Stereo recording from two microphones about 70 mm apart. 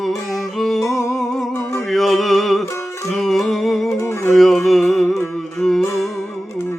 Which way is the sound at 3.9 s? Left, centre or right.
Left.